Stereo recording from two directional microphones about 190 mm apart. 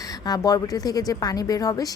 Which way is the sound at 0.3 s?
20° left (ahead or behind).